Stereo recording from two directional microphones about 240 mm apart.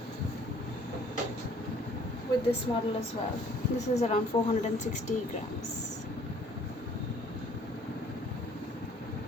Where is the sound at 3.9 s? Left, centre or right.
Left.